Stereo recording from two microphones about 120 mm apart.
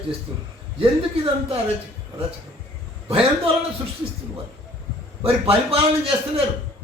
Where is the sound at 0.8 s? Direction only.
50° right (ahead or behind).